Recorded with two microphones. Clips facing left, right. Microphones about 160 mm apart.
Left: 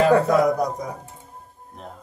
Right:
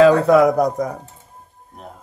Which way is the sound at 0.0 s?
85° right.